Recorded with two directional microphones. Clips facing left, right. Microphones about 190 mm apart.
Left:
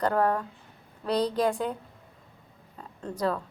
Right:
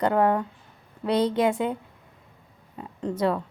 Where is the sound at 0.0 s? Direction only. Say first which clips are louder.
Right 3 dB; 20° right (ahead or behind).